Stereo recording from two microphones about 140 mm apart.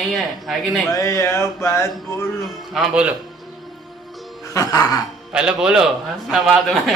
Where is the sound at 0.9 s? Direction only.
20° left (ahead or behind).